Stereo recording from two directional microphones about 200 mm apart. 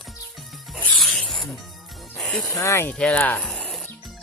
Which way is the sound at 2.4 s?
15° left (ahead or behind).